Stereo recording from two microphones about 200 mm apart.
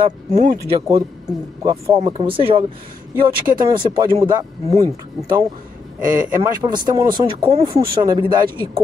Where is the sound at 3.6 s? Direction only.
20° right (ahead or behind).